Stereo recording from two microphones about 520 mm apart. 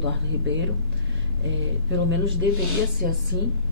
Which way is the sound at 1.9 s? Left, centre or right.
Right.